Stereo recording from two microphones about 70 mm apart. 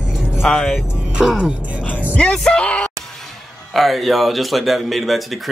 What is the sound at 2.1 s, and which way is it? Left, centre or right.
Music, centre.